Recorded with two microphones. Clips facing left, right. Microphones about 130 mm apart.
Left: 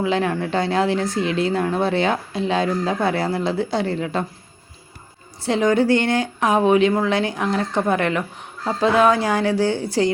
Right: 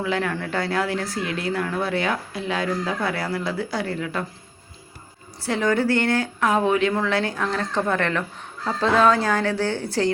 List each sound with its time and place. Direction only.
0.0 s speech: 20° left (ahead or behind)
5.4 s a woman's voice: 20° left (ahead or behind)